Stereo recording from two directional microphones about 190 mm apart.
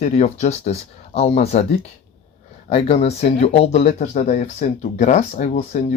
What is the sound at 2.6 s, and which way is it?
Speech, 30° left (ahead or behind).